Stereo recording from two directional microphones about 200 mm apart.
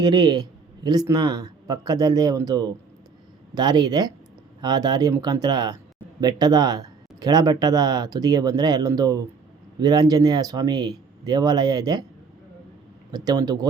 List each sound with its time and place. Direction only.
0.0 s speech: 20° right (ahead or behind)
13.1 s speech: 20° right (ahead or behind)